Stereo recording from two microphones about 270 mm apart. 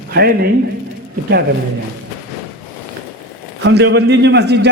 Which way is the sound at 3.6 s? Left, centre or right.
Right.